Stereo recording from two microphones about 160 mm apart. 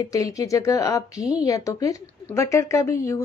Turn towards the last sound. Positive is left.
turn(degrees=20)  # may be behind; listen again after turning